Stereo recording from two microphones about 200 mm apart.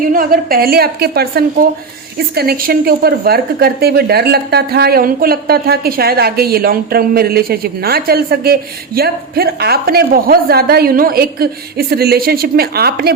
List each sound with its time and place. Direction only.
0.1 s a woman's voice: 45° right (ahead or behind)